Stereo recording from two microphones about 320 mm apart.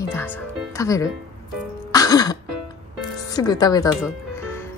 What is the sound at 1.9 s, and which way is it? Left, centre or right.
Throat clearing, centre.